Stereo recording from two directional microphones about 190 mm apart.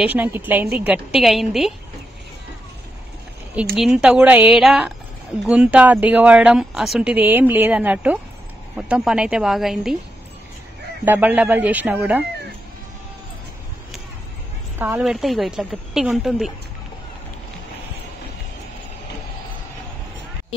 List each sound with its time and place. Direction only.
0.0 s a woman's voice: 10° right (ahead or behind)
3.7 s a woman's voice: 5° right (ahead or behind)
11.1 s a woman's voice: 10° right (ahead or behind)
15.0 s a woman's voice: centre (ahead or behind)